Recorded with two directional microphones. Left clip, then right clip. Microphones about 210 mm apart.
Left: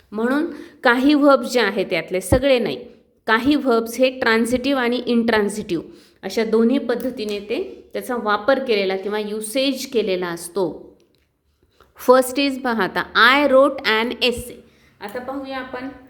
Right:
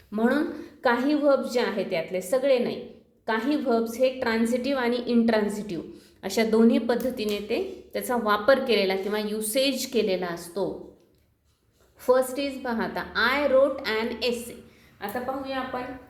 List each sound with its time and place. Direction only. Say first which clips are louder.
0.1 s a woman's voice: left 4 dB; 30° left (ahead or behind)
6.2 s a woman's voice: left 4 dB; 25° left (ahead or behind)
11.9 s a woman's voice: left 8 dB; 45° left (ahead or behind); by 15.8 s 25° left (ahead or behind)